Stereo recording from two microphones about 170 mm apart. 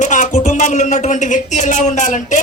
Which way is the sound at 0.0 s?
50° left (ahead or behind).